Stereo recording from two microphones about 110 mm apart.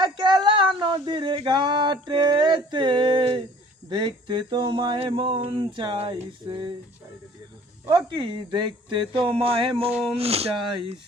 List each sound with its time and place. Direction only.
0.0 s speech: 45° right (ahead or behind)
7.9 s speech: 45° right (ahead or behind)
9.1 s speech: 55° right (ahead or behind)
10.2 s speech: 65° right (ahead or behind)